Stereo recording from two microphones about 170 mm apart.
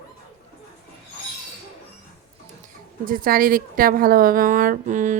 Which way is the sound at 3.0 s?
55° right (ahead or behind).